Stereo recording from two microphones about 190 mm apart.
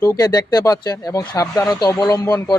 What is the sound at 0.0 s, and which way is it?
Speech, 20° left (ahead or behind).